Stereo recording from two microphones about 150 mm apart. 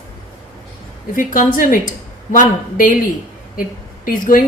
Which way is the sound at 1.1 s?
65° left (ahead or behind).